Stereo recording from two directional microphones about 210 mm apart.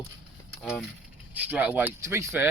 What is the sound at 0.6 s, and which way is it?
Speech, centre (ahead or behind).